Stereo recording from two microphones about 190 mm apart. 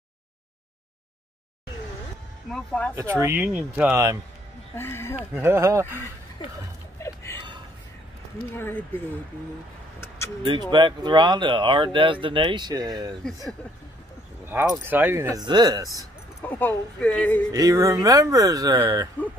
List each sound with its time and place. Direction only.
2.5 s speech: 5° left (ahead or behind)
3.0 s speech: 15° right (ahead or behind)
4.7 s speech: 15° left (ahead or behind)
5.3 s speech: 15° right (ahead or behind)
7.0 s a sound: 15° left (ahead or behind)
8.5 s speech: 10° left (ahead or behind)
10.4 s speech: 25° right (ahead or behind)
14.4 s speech: 10° right (ahead or behind)
16.0 s speech: 10° left (ahead or behind)
17.5 s speech: 20° right (ahead or behind)